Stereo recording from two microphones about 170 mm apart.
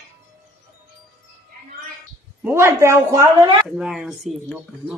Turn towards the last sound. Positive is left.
turn(degrees=0)  # may be behind; listen again after turning